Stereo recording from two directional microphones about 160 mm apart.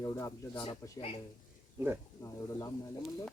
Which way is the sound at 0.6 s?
35° left (ahead or behind).